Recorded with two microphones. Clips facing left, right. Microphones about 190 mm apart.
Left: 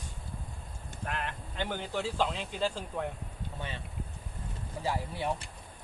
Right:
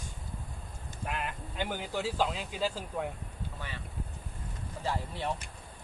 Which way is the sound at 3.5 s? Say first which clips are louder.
Left 5 dB; 25° left (ahead or behind).